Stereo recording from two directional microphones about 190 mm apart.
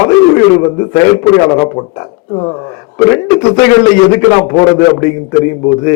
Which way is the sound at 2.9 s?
15° left (ahead or behind).